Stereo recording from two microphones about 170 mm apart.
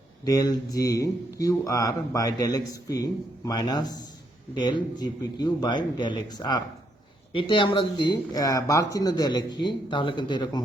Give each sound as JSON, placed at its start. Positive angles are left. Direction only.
{"t": 0.3, "sound": "speech", "side_deg": 20}